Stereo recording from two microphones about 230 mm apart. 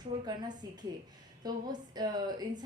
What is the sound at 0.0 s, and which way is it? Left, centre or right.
A woman's voice, centre.